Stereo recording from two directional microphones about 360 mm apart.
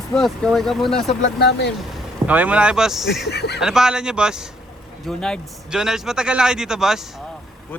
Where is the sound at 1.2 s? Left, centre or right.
Left.